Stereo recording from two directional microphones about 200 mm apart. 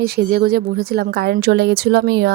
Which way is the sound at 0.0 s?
50° right (ahead or behind).